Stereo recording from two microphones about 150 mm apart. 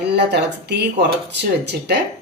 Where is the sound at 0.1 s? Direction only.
90° right.